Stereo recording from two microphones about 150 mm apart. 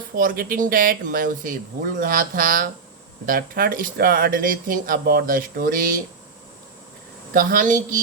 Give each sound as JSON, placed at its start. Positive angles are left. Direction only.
{"t": 0.2, "sound": "speech", "side_deg": -70}
{"t": 7.3, "sound": "speech", "side_deg": -65}